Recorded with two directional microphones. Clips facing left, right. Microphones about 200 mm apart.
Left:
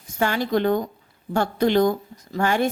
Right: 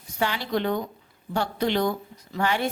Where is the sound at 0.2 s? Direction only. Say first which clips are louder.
Left 5 dB; 50° left (ahead or behind).